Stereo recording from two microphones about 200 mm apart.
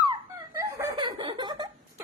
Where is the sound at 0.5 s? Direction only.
15° right (ahead or behind).